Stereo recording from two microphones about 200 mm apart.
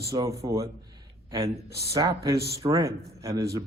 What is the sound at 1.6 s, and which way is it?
Speech, 55° right (ahead or behind).